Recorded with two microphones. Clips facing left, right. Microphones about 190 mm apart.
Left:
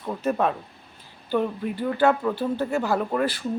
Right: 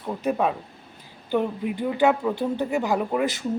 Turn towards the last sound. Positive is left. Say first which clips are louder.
# even
turn(degrees=-15)  # may be behind; listen again after turning